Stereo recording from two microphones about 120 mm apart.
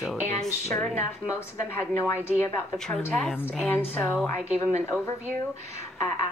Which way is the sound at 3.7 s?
15° left (ahead or behind).